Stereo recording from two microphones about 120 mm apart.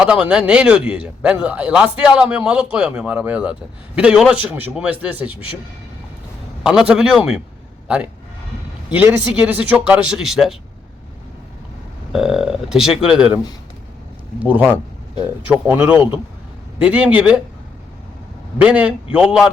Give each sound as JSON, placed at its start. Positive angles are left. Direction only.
{"t": 0.0, "sound": "a man's voice", "side_deg": -10}
{"t": 6.6, "sound": "a man's voice", "side_deg": -5}
{"t": 12.1, "sound": "speech", "side_deg": -5}
{"t": 14.3, "sound": "a man's voice", "side_deg": -10}
{"t": 18.6, "sound": "a man's voice", "side_deg": -10}